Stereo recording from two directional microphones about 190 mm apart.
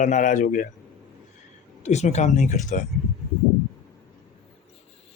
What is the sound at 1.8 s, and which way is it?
Speech, 35° left (ahead or behind).